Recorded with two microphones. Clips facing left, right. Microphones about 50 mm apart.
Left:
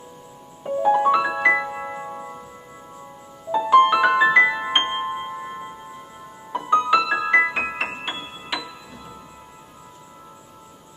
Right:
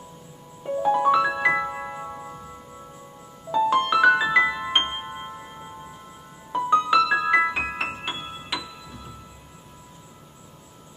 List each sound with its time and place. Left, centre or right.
0.7 s piano: centre
3.5 s music: centre
6.8 s keyboard: centre
7.8 s music: left